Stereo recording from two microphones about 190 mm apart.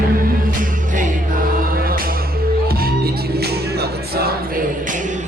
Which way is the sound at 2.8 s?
55° right (ahead or behind).